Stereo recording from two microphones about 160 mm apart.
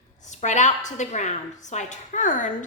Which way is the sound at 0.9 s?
50° left (ahead or behind).